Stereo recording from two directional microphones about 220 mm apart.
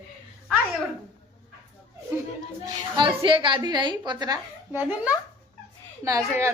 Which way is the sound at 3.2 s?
25° right (ahead or behind).